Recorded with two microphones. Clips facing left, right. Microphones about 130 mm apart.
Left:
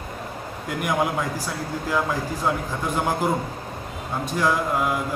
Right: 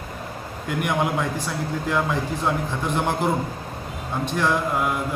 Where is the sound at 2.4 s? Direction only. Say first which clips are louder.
Even; 5° left (ahead or behind).